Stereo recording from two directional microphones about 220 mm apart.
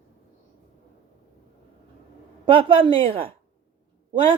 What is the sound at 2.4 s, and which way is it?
Speech, 25° right (ahead or behind).